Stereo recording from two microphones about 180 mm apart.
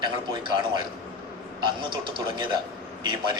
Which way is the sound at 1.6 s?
25° right (ahead or behind).